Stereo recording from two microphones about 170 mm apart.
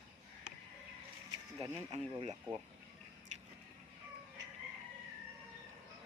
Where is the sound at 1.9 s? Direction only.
40° right (ahead or behind).